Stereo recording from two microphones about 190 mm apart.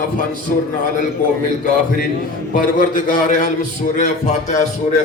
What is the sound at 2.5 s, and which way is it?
Speech, 45° left (ahead or behind).